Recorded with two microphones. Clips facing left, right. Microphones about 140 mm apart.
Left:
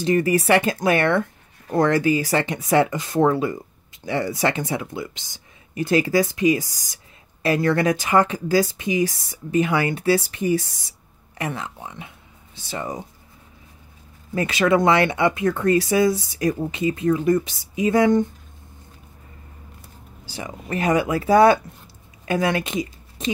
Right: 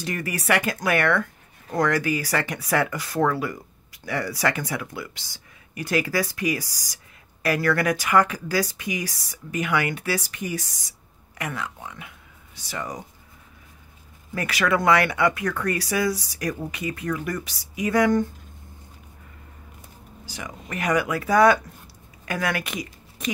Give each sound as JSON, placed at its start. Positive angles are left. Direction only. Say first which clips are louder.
{"t": 0.0, "sound": "speech", "louder": "left 10 dB", "side_deg": 25}
{"t": 14.3, "sound": "speech", "louder": "left 5 dB", "side_deg": 25}
{"t": 20.2, "sound": "speech", "louder": "left 5 dB", "side_deg": 30}